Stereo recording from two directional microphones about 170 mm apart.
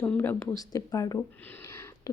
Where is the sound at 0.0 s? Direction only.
10° left (ahead or behind).